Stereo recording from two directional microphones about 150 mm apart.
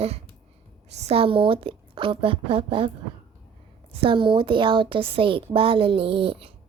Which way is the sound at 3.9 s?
35° right (ahead or behind).